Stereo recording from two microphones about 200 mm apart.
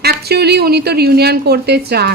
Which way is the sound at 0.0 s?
55° right (ahead or behind).